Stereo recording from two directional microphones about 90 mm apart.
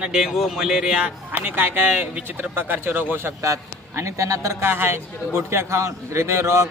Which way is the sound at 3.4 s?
35° right (ahead or behind).